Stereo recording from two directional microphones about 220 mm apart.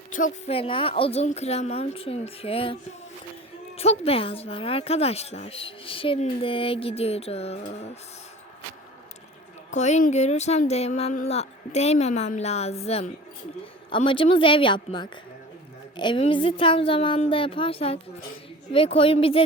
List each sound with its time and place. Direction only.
0.1 s speech: 35° left (ahead or behind)
3.8 s speech: 25° left (ahead or behind)
9.7 s speech: 30° left (ahead or behind)